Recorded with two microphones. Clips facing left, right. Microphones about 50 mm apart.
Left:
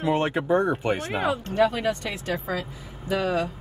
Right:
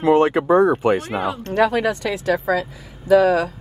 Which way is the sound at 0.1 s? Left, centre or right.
Right.